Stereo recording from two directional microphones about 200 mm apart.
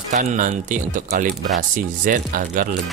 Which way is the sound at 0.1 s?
35° right (ahead or behind).